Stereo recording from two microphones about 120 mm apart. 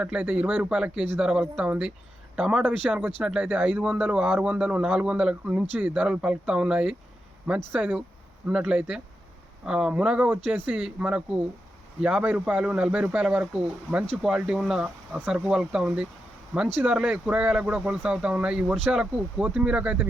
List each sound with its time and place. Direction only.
0.0 s speech: 10° right (ahead or behind)